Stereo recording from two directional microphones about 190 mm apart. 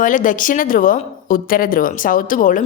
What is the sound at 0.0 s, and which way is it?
A woman's voice, 45° left (ahead or behind).